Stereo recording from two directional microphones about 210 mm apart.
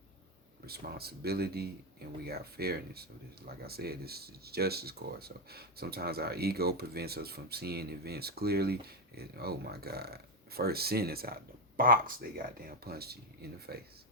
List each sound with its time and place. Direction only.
0.6 s speech: 50° right (ahead or behind)